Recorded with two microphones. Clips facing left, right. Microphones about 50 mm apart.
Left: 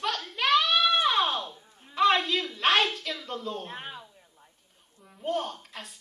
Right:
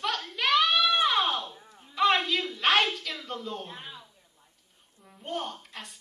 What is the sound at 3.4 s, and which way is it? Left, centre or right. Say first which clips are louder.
Speech: left 2 dB; right.